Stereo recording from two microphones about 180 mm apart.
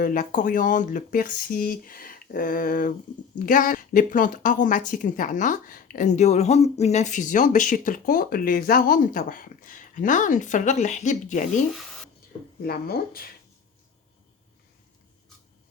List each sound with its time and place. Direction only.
0.0 s a woman's voice: 50° left (ahead or behind)
12.6 s speech: 55° left (ahead or behind)